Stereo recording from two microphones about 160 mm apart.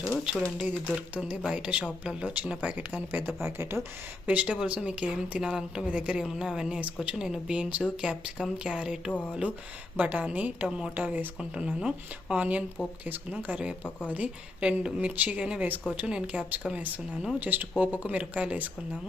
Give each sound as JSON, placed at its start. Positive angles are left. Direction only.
{"t": 0.3, "sound": "speech", "side_deg": 0}
{"t": 1.8, "sound": "speech", "side_deg": 5}
{"t": 2.1, "sound": "speech", "side_deg": -5}